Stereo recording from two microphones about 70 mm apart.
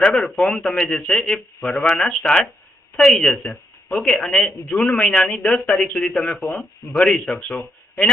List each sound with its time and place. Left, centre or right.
0.0 s a man's voice: centre
6.9 s a man's voice: centre